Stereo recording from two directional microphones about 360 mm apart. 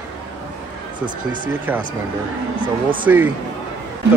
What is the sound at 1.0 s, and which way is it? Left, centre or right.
Speech, right.